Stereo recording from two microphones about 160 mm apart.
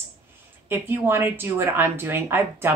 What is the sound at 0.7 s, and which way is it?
Speech, 15° right (ahead or behind).